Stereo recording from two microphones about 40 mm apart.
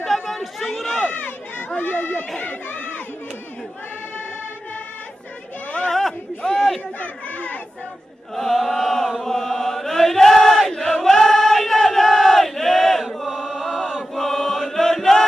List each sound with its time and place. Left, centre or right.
0.0 s chatter: centre
1.1 s run: left
1.8 s speech: left
2.4 s chatter: left
5.9 s a sound: centre
7.0 s chatter: left
8.4 s chant: centre